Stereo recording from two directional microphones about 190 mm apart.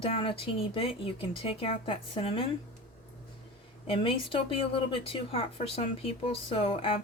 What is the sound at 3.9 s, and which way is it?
Speech, 30° left (ahead or behind).